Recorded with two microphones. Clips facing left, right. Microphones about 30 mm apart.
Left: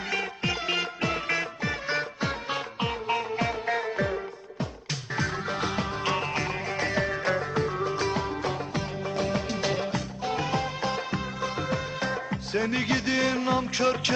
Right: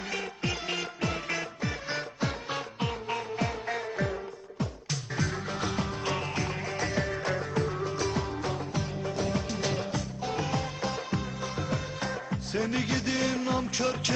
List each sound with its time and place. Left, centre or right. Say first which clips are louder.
0.1 s music: left 4 dB; left